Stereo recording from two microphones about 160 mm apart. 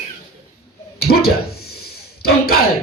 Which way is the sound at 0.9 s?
75° left (ahead or behind).